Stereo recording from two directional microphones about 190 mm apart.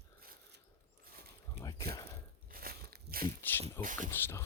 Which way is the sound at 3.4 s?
10° left (ahead or behind).